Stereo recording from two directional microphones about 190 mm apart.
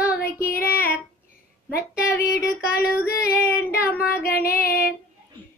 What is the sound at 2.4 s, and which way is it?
Female singing, 55° left (ahead or behind).